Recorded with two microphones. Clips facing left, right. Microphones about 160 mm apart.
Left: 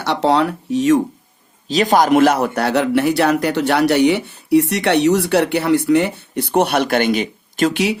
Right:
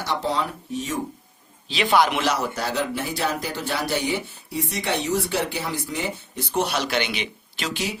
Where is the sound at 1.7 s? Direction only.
40° left (ahead or behind).